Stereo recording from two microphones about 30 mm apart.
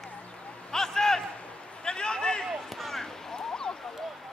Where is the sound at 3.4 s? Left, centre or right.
Left.